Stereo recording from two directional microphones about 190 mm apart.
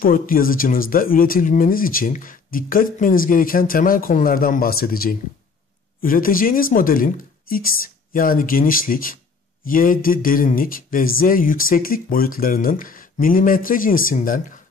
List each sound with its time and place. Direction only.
0.0 s speech: 50° left (ahead or behind)